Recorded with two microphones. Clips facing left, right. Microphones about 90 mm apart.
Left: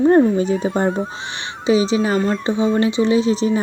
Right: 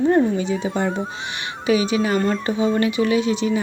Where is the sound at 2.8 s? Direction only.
30° left (ahead or behind).